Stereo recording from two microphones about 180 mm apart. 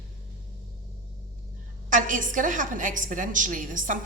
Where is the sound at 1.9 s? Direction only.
45° right (ahead or behind).